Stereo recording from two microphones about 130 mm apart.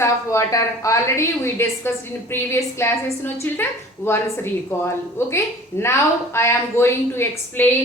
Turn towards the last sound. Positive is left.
turn(degrees=20)  # may be behind; listen again after turning